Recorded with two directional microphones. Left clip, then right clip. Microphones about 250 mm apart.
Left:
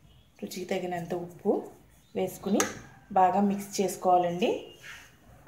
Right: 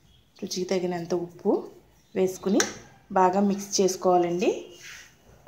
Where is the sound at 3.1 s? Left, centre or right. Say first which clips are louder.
Right 2 dB; right.